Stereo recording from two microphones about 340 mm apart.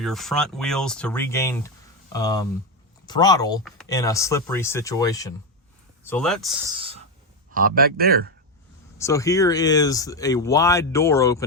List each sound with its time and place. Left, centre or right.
0.0 s speech: centre
6.7 s a sound: centre
7.5 s speech: right
9.0 s speech: centre